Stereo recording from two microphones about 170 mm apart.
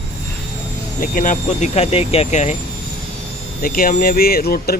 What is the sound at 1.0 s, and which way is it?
Speech, 50° left (ahead or behind).